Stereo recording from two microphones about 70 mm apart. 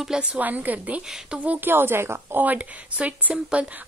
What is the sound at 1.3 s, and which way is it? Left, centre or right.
A woman's voice, right.